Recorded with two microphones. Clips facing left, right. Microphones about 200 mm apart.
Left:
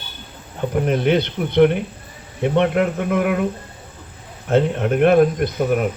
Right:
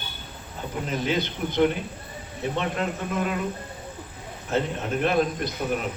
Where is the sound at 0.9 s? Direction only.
65° left (ahead or behind).